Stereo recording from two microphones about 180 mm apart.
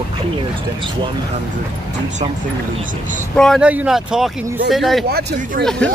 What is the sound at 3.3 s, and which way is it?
Speech, centre (ahead or behind).